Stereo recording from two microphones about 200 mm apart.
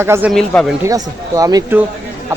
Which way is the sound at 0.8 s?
15° right (ahead or behind).